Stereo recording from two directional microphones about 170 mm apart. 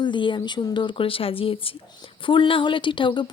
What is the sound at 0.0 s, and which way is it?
A woman's voice, 30° left (ahead or behind).